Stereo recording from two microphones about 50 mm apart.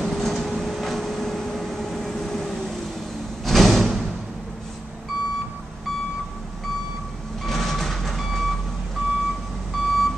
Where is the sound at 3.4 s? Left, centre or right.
Centre.